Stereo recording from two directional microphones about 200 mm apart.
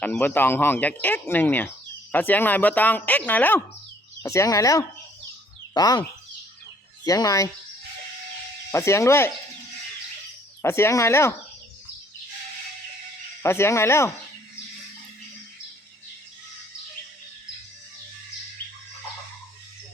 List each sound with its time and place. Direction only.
0.0 s speech: 5° left (ahead or behind)
8.7 s speech: 15° left (ahead or behind)
10.6 s speech: 15° left (ahead or behind)
13.4 s speech: 15° left (ahead or behind)